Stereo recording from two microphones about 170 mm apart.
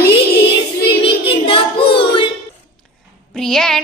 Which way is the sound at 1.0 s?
35° left (ahead or behind).